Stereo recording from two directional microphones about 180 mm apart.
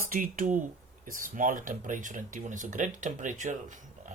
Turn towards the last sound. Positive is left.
turn(degrees=-45)  # may be behind; listen again after turning